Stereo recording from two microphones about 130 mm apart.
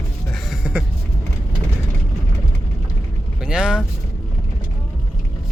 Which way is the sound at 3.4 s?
5° right (ahead or behind).